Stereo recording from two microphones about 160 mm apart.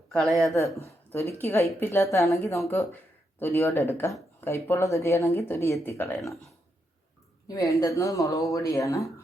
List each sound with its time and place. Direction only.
0.1 s speech: centre (ahead or behind)
0.9 s speech: 15° left (ahead or behind)
7.4 s speech: 20° left (ahead or behind)